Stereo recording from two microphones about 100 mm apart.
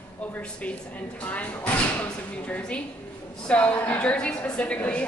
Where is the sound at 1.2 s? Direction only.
15° left (ahead or behind).